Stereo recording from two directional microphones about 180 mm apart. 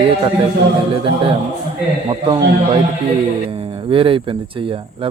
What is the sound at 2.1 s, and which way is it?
Speech, 30° right (ahead or behind).